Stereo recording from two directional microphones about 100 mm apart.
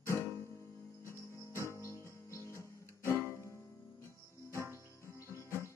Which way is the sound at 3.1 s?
25° left (ahead or behind).